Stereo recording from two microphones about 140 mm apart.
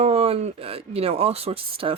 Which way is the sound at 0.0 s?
45° right (ahead or behind).